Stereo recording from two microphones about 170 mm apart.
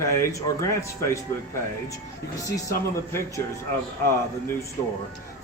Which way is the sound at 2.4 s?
15° left (ahead or behind).